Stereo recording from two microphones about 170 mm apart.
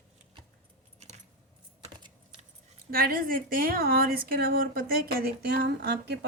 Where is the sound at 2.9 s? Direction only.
60° right (ahead or behind).